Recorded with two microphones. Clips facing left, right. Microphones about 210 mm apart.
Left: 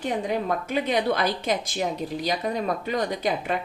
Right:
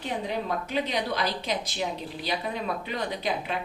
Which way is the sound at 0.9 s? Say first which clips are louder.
Left 5 dB; 50° left (ahead or behind).